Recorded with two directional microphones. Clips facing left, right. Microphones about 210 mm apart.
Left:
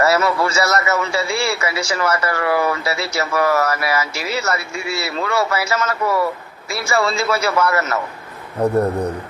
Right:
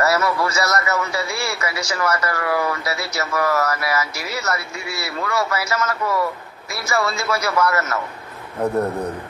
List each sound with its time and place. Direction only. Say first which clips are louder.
0.0 s speech: left 3 dB; 25° left (ahead or behind)